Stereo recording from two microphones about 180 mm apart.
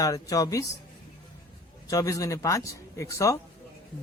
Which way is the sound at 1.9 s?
20° left (ahead or behind).